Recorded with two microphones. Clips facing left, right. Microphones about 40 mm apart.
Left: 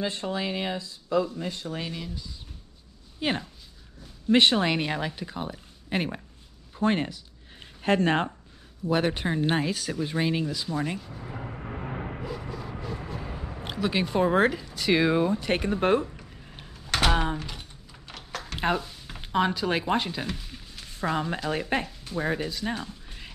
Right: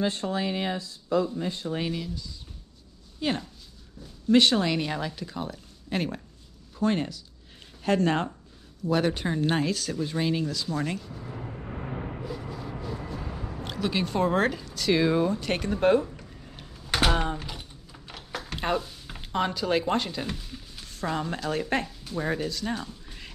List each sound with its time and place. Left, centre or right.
0.4 s speech: left
1.9 s speech: centre
3.2 s speech: left
10.8 s music: centre
12.3 s music: centre
13.1 s a sound: centre
17.1 s typing: centre
18.6 s a sound: centre
19.2 s speech: centre